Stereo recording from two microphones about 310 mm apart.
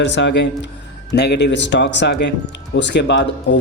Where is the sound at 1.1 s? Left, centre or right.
Left.